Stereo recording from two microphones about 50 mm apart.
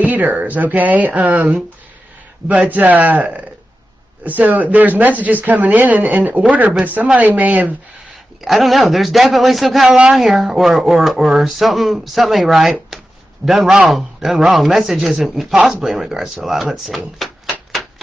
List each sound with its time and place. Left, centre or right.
0.0 s speech: right
2.7 s speech: right
8.5 s speech: centre